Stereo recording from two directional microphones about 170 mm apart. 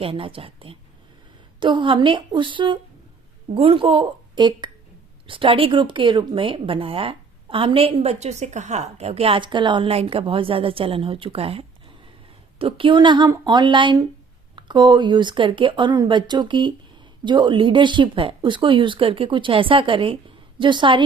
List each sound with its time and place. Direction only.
0.0 s a woman's voice: 30° right (ahead or behind)